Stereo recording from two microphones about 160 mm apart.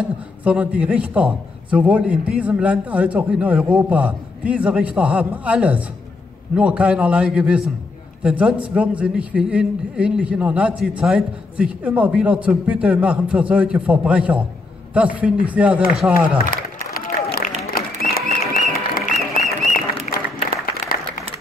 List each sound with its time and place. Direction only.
0.4 s a man's voice: 10° right (ahead or behind)
16.4 s applause: 65° left (ahead or behind)